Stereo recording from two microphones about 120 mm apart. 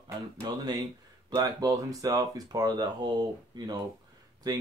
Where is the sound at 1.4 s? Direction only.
30° right (ahead or behind).